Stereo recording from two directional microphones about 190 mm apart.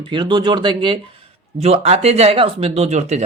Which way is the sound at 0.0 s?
25° right (ahead or behind).